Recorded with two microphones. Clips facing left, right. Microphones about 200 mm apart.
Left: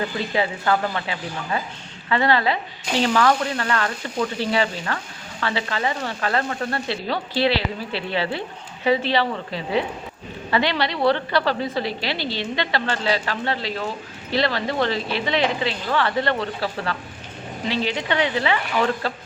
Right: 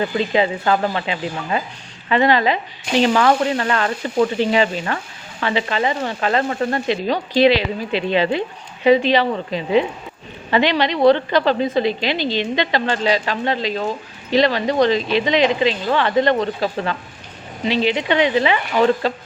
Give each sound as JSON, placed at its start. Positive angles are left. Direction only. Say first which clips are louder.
{"t": 0.3, "sound": "a woman's voice", "louder": "right 3 dB", "side_deg": -20}